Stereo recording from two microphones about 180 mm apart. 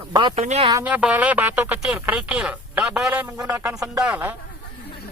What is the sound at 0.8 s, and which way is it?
A man's voice, 5° right (ahead or behind).